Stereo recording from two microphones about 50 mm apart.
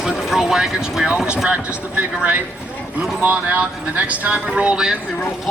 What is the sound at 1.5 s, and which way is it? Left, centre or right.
Speech, right.